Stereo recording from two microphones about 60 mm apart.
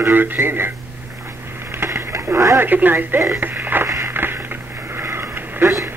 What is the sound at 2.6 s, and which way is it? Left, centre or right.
A woman's voice, right.